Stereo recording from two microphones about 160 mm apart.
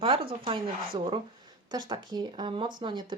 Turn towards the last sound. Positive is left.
turn(degrees=-30)  # may be behind; listen again after turning